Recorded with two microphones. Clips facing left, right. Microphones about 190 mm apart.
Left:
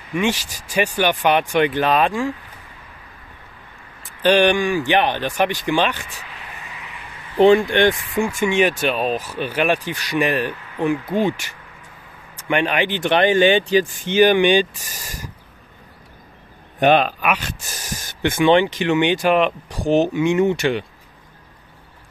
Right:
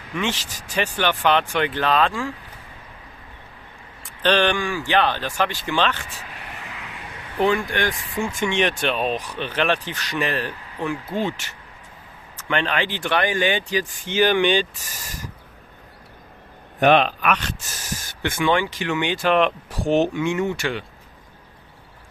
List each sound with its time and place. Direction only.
0.1 s speech: 10° left (ahead or behind)
4.2 s speech: 10° left (ahead or behind)
7.3 s speech: 25° left (ahead or behind)
8.2 s speech: 10° left (ahead or behind)
17.2 s speech: 10° left (ahead or behind)
18.2 s speech: 20° left (ahead or behind)
19.3 s speech: centre (ahead or behind)
20.2 s speech: 20° left (ahead or behind)